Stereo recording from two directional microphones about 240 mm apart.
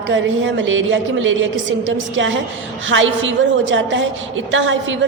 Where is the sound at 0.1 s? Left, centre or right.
Right.